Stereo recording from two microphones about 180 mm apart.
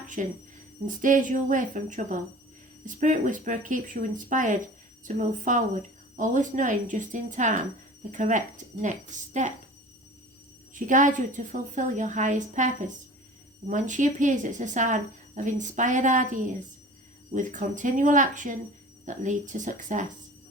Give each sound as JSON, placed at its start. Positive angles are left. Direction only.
{"t": 0.2, "sound": "speech", "side_deg": -45}
{"t": 10.8, "sound": "speech", "side_deg": -45}